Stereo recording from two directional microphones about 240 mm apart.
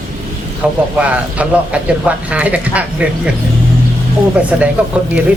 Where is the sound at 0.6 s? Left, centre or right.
Centre.